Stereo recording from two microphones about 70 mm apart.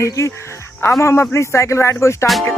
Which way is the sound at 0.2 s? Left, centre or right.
Left.